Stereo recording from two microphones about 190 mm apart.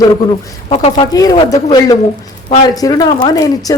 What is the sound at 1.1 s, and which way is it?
Speech, 20° left (ahead or behind).